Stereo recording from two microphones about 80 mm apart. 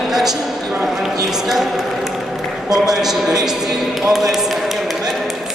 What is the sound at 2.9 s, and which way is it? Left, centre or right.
Speech, centre.